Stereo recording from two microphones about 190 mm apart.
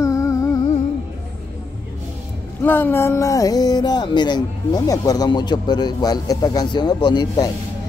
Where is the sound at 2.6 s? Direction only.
10° left (ahead or behind).